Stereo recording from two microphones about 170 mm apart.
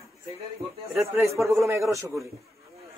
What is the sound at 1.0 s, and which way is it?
A man's voice, 15° right (ahead or behind).